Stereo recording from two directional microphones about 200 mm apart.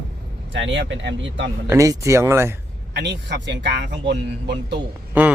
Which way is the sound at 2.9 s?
60° right (ahead or behind).